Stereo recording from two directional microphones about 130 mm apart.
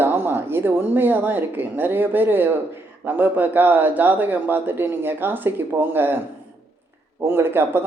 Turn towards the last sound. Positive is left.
turn(degrees=-15)  # may be behind; listen again after turning